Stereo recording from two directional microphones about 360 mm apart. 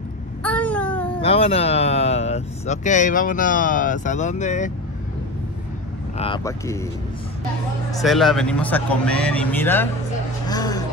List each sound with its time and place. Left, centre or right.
0.4 s babbling: centre
1.2 s speech: centre
6.1 s speech: centre
7.9 s speech: centre
10.4 s vehicle: centre